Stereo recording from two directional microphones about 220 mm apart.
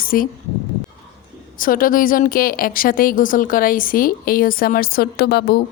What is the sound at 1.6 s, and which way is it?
A woman's voice, 40° left (ahead or behind).